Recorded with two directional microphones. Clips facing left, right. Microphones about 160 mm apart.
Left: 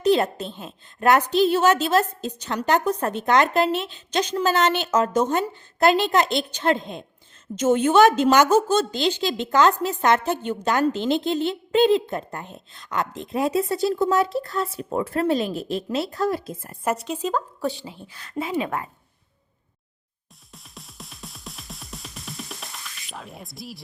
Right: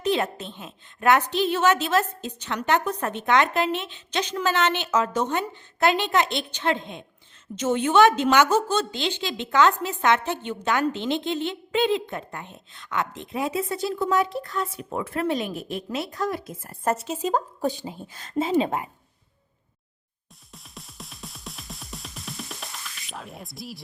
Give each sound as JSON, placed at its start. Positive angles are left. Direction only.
{"t": 0.0, "sound": "a woman's voice", "side_deg": 40}
{"t": 17.0, "sound": "speech", "side_deg": -5}
{"t": 17.6, "sound": "a woman's voice", "side_deg": -45}
{"t": 18.3, "sound": "speech", "side_deg": -25}
{"t": 20.5, "sound": "music", "side_deg": 0}